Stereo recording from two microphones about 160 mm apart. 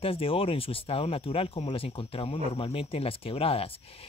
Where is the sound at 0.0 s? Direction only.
35° left (ahead or behind).